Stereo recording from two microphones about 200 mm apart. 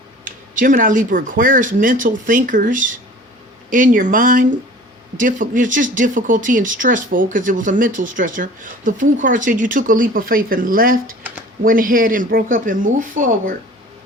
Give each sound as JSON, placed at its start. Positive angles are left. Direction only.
{"t": 0.3, "sound": "speech", "side_deg": -40}